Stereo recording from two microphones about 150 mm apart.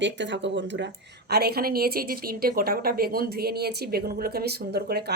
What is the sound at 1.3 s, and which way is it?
A woman's voice, 90° right.